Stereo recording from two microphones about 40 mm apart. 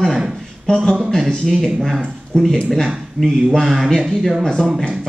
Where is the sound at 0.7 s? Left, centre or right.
Centre.